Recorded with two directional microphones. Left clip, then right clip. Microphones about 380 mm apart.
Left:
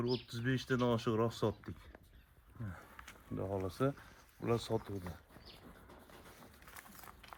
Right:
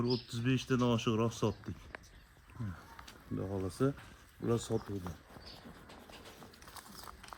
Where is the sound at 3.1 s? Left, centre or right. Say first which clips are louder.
Even; left.